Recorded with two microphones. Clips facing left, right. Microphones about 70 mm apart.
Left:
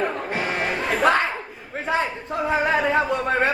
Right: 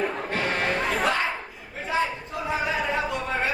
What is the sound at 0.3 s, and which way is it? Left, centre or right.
Chatter, centre.